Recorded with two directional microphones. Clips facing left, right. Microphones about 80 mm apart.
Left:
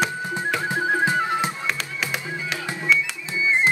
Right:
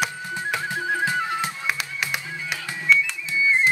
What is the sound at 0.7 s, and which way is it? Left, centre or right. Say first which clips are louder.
Music: left 4 dB; left.